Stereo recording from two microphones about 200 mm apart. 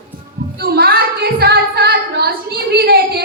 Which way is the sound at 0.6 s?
50° right (ahead or behind).